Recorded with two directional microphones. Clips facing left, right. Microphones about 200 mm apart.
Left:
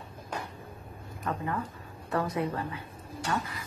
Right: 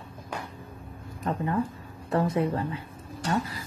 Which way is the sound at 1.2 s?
30° right (ahead or behind).